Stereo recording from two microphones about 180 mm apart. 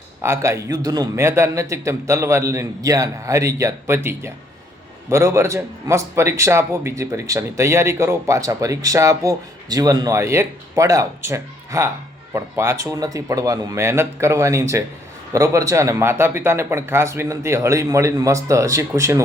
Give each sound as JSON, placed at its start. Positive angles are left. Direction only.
{"t": 0.2, "sound": "a man's voice", "side_deg": -15}